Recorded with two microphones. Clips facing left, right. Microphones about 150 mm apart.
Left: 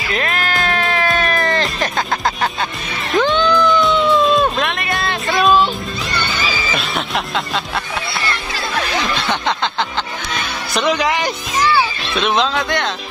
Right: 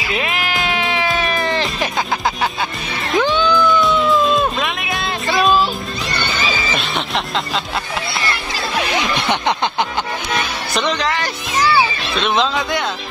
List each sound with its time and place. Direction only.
0.1 s music: 10° right (ahead or behind)
8.9 s snicker: 20° right (ahead or behind)
10.7 s speech: 5° left (ahead or behind)
12.2 s speech: centre (ahead or behind)